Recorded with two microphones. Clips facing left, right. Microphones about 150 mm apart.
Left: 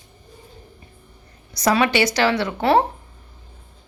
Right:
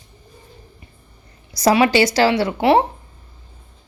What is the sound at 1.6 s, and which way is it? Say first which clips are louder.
A woman's voice: right 4 dB; 30° right (ahead or behind).